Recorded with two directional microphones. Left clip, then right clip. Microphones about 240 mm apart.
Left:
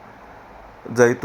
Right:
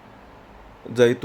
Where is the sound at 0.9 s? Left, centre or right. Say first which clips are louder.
Left 2 dB; centre.